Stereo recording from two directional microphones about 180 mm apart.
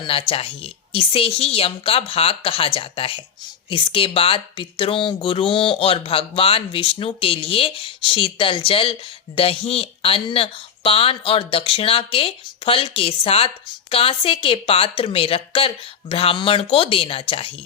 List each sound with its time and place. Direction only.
0.0 s speech: 30° left (ahead or behind)